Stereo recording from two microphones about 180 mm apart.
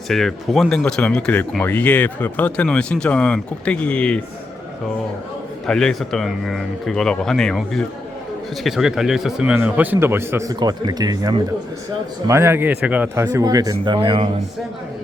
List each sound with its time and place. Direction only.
0.1 s speech: centre (ahead or behind)
5.6 s a man's voice: centre (ahead or behind)
13.2 s speech: 20° right (ahead or behind)